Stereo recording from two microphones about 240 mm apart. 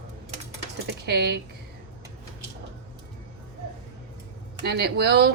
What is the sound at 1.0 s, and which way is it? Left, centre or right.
Speech, right.